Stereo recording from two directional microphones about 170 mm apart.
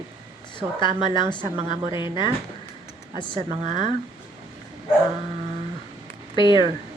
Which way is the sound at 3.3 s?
40° right (ahead or behind).